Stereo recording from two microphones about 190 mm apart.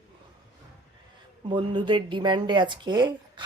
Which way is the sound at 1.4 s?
25° right (ahead or behind).